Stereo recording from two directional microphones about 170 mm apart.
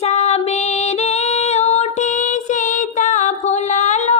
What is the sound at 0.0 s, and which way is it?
Female singing, 40° left (ahead or behind).